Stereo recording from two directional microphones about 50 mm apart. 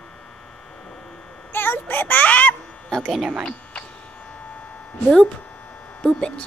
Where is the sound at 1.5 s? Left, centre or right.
Left.